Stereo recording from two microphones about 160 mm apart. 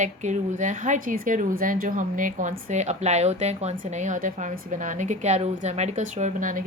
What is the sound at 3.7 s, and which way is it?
A woman's voice, 55° right (ahead or behind).